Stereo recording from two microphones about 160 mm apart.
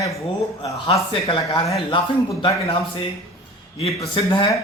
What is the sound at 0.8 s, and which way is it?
A man's voice, 30° left (ahead or behind).